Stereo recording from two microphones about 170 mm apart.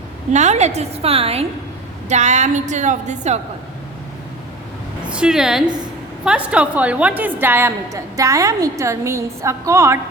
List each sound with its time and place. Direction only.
0.3 s a woman's voice: 40° right (ahead or behind)
5.1 s a woman's voice: 5° right (ahead or behind)